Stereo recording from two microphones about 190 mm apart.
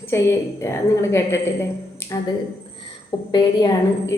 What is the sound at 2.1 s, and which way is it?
Speech, 15° left (ahead or behind).